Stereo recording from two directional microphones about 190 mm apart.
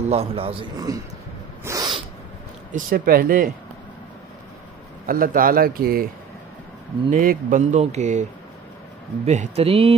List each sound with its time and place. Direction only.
0.1 s a man's voice: 30° right (ahead or behind)
1.6 s owl: 15° right (ahead or behind)
2.7 s a man's voice: 50° right (ahead or behind)
5.0 s a man's voice: 50° right (ahead or behind)
7.1 s speech: 45° right (ahead or behind); by 9.9 s 30° right (ahead or behind)